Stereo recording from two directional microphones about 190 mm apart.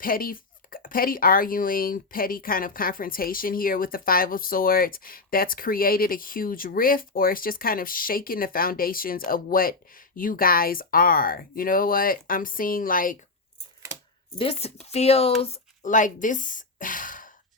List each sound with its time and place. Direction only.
0.0 s speech: 50° left (ahead or behind)
14.3 s speech: 30° left (ahead or behind); by 17.3 s 45° left (ahead or behind)